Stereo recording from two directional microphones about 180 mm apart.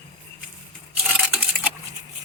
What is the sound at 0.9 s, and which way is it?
Coin, 10° right (ahead or behind).